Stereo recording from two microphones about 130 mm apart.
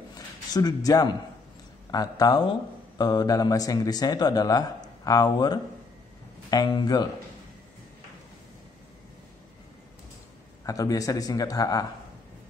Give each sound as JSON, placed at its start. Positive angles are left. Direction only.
{"t": 0.1, "sound": "a sound", "side_deg": 30}
{"t": 1.9, "sound": "speech", "side_deg": 30}
{"t": 10.6, "sound": "speech", "side_deg": 25}